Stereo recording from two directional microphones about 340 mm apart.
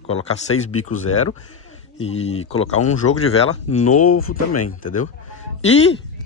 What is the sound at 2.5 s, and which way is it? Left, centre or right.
Speech, left.